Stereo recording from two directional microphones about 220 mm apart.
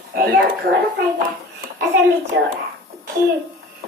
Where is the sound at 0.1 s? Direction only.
45° right (ahead or behind).